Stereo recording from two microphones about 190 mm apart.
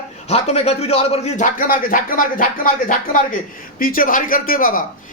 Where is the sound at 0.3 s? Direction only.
35° left (ahead or behind).